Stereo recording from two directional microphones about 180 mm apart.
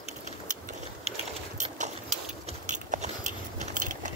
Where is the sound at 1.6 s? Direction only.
40° right (ahead or behind).